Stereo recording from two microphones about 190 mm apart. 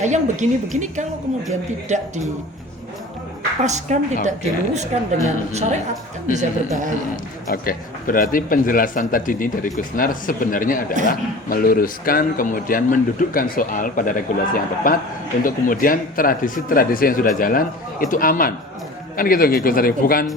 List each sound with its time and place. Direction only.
0.0 s a woman's voice: 40° right (ahead or behind)
3.6 s a woman's voice: 40° right (ahead or behind)
6.3 s a woman's voice: 40° right (ahead or behind)
7.5 s speech: 50° left (ahead or behind)